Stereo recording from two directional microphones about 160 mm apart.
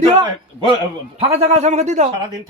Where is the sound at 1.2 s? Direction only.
40° right (ahead or behind).